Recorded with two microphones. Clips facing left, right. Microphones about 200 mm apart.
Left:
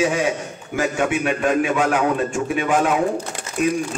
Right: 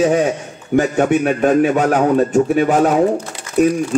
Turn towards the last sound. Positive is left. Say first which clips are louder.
# right 7 dB
turn(degrees=-40)  # may be behind; listen again after turning